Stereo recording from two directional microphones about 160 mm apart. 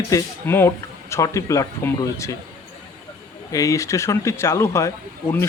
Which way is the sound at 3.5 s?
20° left (ahead or behind).